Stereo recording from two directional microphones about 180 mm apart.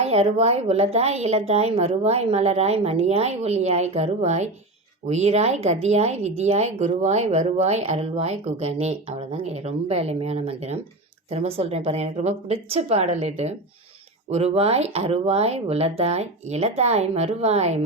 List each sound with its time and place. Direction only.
0.0 s speech: 35° right (ahead or behind)